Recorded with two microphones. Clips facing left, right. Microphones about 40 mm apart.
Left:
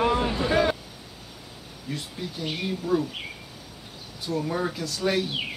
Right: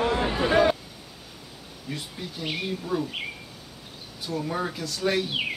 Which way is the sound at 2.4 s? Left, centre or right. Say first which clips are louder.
Left 1 dB; centre.